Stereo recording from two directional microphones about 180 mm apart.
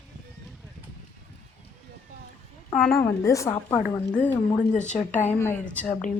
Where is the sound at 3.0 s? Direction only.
15° left (ahead or behind).